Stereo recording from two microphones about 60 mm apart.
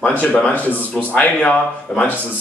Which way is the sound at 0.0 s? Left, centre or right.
Left.